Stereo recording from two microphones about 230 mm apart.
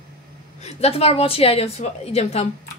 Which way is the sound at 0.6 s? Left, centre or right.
Left.